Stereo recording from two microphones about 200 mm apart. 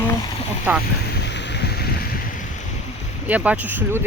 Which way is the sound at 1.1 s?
60° left (ahead or behind).